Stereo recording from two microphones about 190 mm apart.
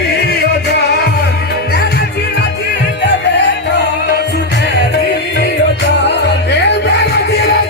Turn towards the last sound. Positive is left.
turn(degrees=60)  # may be behind; listen again after turning